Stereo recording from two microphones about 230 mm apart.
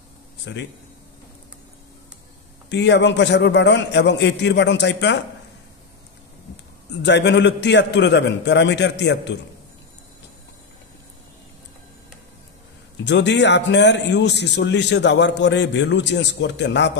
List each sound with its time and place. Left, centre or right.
2.7 s a man's voice: left
7.0 s a man's voice: left
13.0 s a man's voice: left